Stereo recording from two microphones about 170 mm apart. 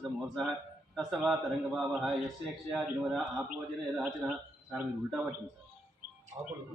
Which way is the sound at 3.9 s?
5° right (ahead or behind).